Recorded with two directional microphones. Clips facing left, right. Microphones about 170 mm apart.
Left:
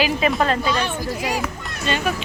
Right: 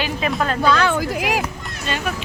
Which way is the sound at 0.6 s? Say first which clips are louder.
Right 5 dB; 85° right.